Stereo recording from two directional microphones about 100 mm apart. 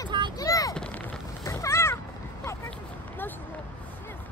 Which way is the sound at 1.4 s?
30° left (ahead or behind).